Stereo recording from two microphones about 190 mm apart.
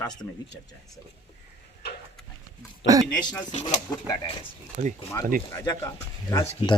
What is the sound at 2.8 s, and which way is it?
Speech, 70° left (ahead or behind).